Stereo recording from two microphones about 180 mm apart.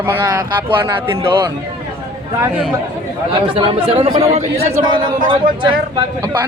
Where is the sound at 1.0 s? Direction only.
15° right (ahead or behind).